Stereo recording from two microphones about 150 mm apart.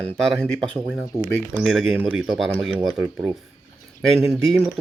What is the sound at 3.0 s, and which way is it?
Speech, 15° right (ahead or behind).